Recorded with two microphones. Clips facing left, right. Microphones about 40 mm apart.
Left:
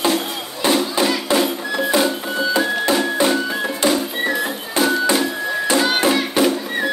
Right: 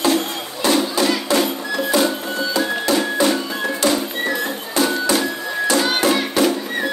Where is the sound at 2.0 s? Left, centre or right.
Centre.